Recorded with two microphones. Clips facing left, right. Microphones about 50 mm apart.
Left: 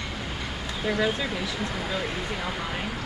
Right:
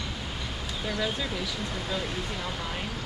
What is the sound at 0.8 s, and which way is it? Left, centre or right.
Speech, centre.